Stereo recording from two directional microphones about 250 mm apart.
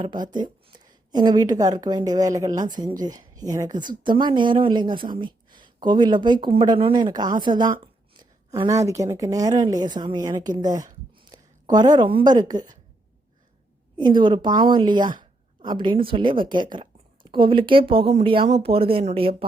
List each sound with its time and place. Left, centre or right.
0.0 s speech: centre
13.9 s a woman's voice: centre